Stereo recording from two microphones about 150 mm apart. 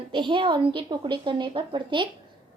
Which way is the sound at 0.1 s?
35° right (ahead or behind).